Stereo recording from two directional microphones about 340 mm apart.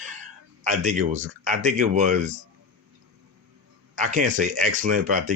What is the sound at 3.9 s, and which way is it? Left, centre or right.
Speech, right.